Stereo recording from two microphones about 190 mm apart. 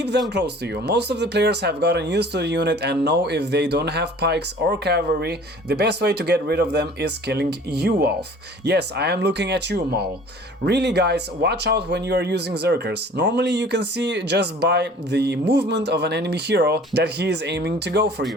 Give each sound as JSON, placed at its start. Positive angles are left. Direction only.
{"t": 0.3, "sound": "speech", "side_deg": -60}